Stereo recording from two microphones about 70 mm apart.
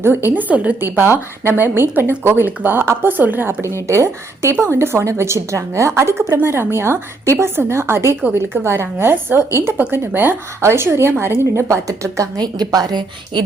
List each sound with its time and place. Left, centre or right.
0.3 s a woman's voice: right
10.1 s a woman's voice: right
12.4 s a woman's voice: right